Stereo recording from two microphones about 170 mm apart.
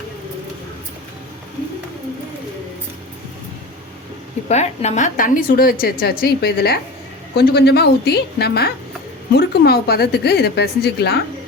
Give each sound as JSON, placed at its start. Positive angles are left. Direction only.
{"t": 4.4, "sound": "a woman's voice", "side_deg": 40}